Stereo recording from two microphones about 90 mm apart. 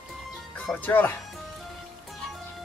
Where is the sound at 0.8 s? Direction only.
20° left (ahead or behind).